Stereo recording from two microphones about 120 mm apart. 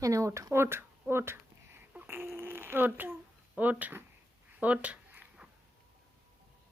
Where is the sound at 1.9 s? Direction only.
15° right (ahead or behind).